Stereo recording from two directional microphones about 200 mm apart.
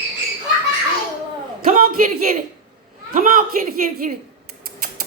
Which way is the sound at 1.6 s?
45° right (ahead or behind).